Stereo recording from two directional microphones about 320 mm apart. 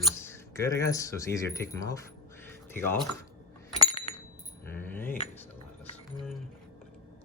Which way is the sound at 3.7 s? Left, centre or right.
Centre.